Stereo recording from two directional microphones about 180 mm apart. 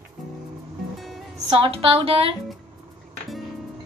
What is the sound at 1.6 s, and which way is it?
Speech, 30° right (ahead or behind).